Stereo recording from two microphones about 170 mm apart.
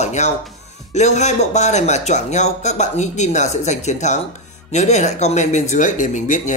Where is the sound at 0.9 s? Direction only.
45° left (ahead or behind).